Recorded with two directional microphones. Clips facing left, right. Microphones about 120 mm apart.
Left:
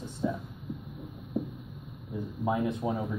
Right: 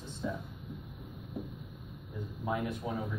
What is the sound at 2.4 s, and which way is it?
Speech, 25° left (ahead or behind).